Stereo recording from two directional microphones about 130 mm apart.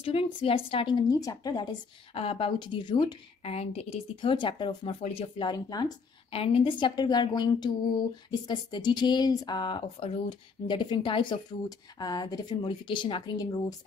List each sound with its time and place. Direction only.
0.0 s speech: 45° left (ahead or behind)
2.1 s speech: 45° left (ahead or behind)
3.4 s speech: 50° left (ahead or behind)
5.0 s speech: 50° left (ahead or behind)
5.5 s speech: 30° left (ahead or behind)
6.3 s speech: 45° left (ahead or behind); by 13.7 s 30° left (ahead or behind)